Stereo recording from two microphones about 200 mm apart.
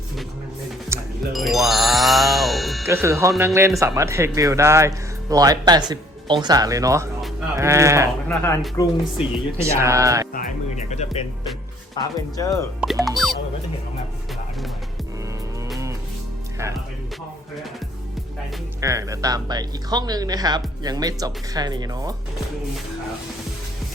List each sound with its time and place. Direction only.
0.9 s music: 15° right (ahead or behind)
1.3 s music: centre (ahead or behind)
2.8 s speech: 15° right (ahead or behind)
8.3 s speech: 10° left (ahead or behind)
9.1 s speech: 15° right (ahead or behind)
10.3 s speech: 40° left (ahead or behind)
12.4 s speech: 15° left (ahead or behind)
13.1 s speech: centre (ahead or behind)
18.8 s speech: 15° right (ahead or behind)